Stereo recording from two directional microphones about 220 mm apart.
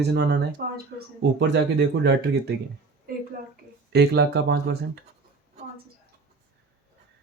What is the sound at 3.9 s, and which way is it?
Speech, 50° right (ahead or behind).